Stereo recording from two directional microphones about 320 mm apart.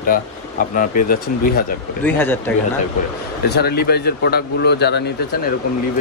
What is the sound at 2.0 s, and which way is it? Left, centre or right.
Speech, centre.